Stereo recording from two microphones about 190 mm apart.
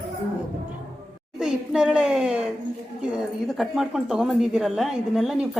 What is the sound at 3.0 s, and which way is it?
Speech, centre (ahead or behind).